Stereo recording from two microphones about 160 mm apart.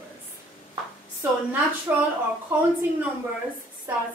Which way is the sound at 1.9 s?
10° right (ahead or behind).